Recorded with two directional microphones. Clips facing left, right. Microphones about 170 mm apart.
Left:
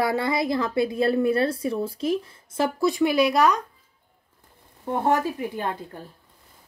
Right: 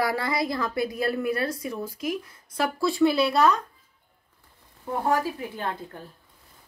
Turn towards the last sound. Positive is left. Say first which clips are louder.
# left 3 dB
turn(degrees=15)  # may be behind; listen again after turning